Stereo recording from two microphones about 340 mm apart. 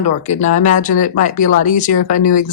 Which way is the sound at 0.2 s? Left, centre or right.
Left.